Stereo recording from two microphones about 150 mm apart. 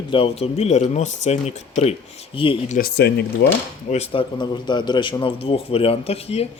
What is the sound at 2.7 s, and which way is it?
Speech, 80° left.